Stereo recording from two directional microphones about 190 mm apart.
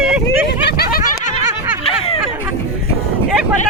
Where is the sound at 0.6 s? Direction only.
60° left (ahead or behind).